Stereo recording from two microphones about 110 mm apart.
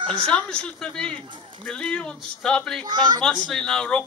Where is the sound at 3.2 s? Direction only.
5° left (ahead or behind).